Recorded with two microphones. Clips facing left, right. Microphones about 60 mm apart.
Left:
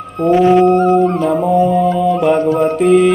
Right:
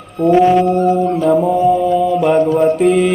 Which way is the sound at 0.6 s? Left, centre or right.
Left.